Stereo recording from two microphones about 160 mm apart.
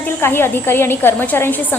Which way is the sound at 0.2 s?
15° left (ahead or behind).